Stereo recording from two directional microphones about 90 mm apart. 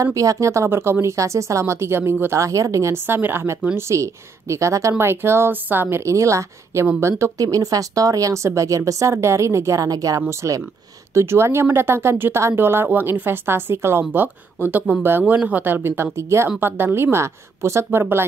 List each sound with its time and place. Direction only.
0.0 s speech: 35° right (ahead or behind)